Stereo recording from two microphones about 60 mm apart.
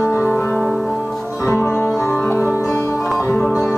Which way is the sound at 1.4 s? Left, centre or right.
Left.